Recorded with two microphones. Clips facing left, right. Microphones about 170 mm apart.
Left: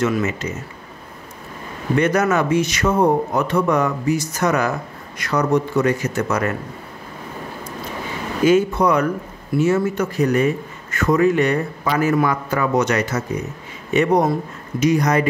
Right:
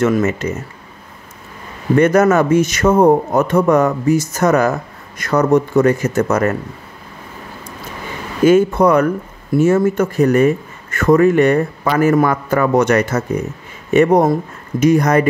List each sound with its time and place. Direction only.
0.0 s speech: 50° right (ahead or behind)
2.0 s speech: 50° right (ahead or behind)
8.5 s speech: 50° right (ahead or behind)